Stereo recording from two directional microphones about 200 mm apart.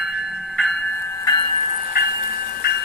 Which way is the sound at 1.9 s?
50° left (ahead or behind).